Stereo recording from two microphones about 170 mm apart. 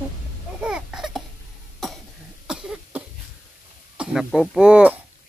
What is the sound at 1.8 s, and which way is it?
Cough, centre (ahead or behind).